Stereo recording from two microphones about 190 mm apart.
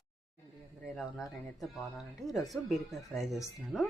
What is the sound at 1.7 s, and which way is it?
Speech, centre (ahead or behind).